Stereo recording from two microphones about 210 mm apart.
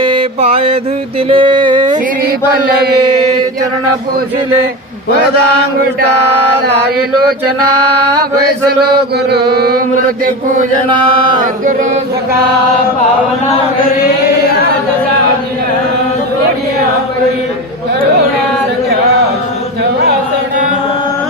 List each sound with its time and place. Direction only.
0.0 s mantra: 25° right (ahead or behind)
1.3 s a sound: 25° right (ahead or behind)
9.3 s mantra: 50° right (ahead or behind)